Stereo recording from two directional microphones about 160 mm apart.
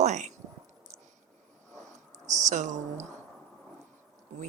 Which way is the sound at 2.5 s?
50° right (ahead or behind).